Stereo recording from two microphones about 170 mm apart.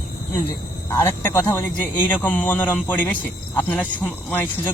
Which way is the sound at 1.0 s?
15° left (ahead or behind).